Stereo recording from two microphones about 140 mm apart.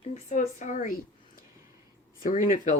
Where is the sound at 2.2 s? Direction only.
70° left (ahead or behind).